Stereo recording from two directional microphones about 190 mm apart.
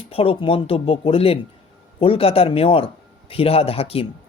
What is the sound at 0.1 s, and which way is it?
Speech, 30° left (ahead or behind).